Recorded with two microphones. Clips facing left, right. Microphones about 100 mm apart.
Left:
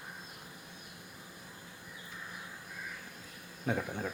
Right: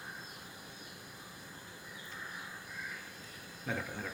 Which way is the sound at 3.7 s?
20° left (ahead or behind).